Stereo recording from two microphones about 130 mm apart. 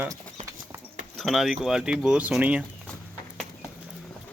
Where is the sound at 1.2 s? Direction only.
Centre (ahead or behind).